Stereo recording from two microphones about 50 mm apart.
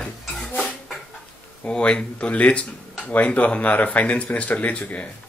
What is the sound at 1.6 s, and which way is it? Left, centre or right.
Speech, left.